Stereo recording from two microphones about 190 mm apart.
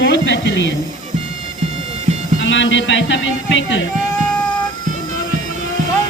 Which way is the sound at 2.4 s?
75° left (ahead or behind).